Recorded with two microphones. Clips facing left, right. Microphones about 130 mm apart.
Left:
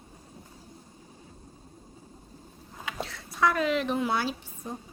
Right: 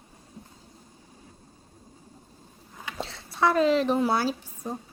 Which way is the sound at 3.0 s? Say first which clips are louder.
Right 2 dB; 30° right (ahead or behind).